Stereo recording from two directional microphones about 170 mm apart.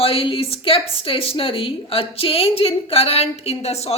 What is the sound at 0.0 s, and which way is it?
Speech, 35° left (ahead or behind).